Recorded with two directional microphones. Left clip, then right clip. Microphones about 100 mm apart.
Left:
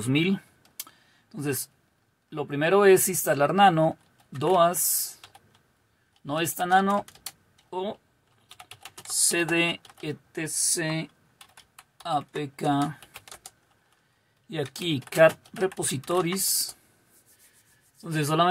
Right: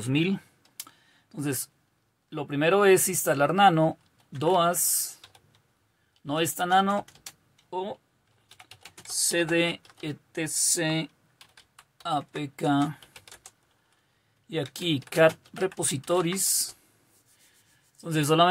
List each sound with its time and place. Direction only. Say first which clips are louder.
0.0 s computer keyboard: left 2 dB; 5° left (ahead or behind); by 1.7 s 15° right (ahead or behind)
2.2 s speech: right 1 dB; 10° right (ahead or behind)
6.2 s speech: even; 15° right (ahead or behind)
7.7 s speech: left 1 dB; centre (ahead or behind)
9.1 s speech: even; 10° left (ahead or behind); by 13.0 s 10° right (ahead or behind)
14.5 s speech: right 1 dB; 10° right (ahead or behind)
17.9 s a man's voice: right 2 dB; 25° right (ahead or behind)